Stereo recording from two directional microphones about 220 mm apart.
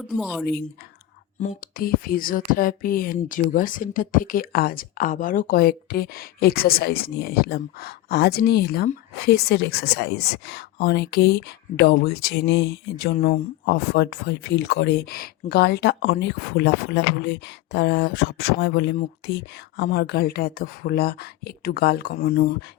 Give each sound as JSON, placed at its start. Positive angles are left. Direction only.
{"t": 0.2, "sound": "a woman's voice", "side_deg": 0}
{"t": 1.4, "sound": "speech", "side_deg": 35}